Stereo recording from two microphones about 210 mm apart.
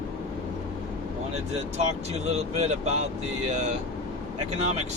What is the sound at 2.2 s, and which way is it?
Speech, 30° right (ahead or behind).